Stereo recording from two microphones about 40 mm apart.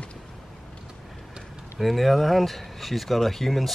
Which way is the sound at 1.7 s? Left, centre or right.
Centre.